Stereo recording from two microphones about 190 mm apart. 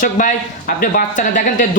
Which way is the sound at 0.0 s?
45° left (ahead or behind).